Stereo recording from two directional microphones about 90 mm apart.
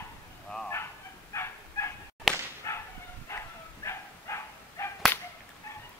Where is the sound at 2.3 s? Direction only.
Centre (ahead or behind).